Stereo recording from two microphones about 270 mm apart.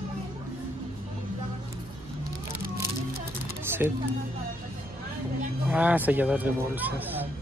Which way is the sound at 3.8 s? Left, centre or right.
Centre.